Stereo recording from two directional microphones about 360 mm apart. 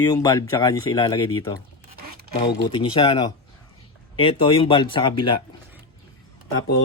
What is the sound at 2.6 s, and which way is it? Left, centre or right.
Speech, centre.